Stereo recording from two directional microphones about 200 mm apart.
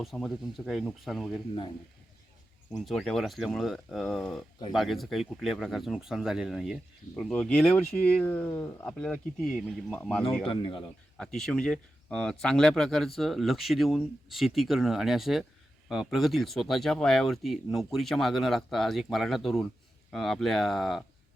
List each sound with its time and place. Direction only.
0.0 s speech: centre (ahead or behind)
2.7 s speech: centre (ahead or behind)
10.4 s speech: 25° left (ahead or behind)
11.2 s speech: centre (ahead or behind)